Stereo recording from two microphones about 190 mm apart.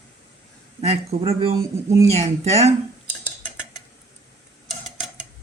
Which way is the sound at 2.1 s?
35° right (ahead or behind).